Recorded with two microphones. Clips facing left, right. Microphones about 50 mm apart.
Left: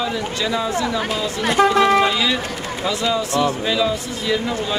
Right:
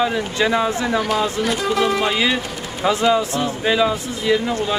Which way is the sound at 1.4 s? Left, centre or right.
Left.